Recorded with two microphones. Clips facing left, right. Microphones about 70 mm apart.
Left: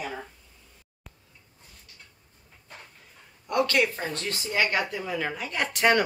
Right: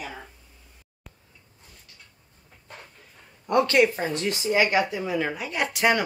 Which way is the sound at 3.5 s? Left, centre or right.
Right.